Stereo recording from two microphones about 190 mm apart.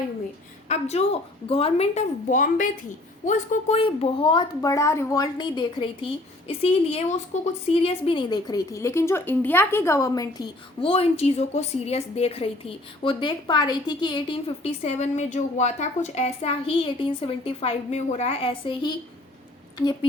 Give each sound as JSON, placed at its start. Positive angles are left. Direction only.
{"t": 0.7, "sound": "a woman's voice", "side_deg": 35}